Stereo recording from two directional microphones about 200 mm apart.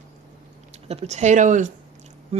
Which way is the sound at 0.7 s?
35° right (ahead or behind).